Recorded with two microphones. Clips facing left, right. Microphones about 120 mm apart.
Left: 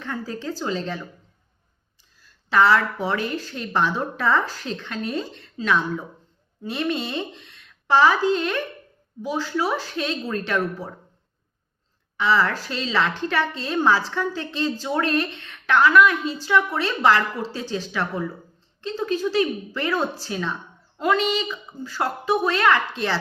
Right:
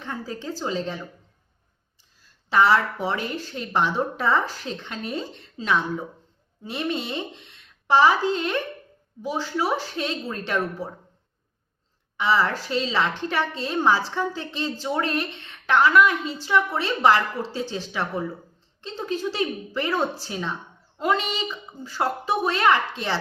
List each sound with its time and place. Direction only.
0.0 s speech: 20° right (ahead or behind)
2.5 s speech: 20° right (ahead or behind)
12.1 s speech: 20° right (ahead or behind)